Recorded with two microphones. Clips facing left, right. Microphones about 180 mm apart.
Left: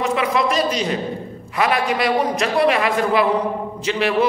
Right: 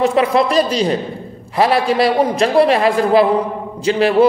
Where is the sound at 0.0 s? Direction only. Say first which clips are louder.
Right 6 dB; 35° right (ahead or behind).